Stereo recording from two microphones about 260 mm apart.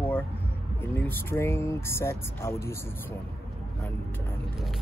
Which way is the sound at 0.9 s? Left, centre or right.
Centre.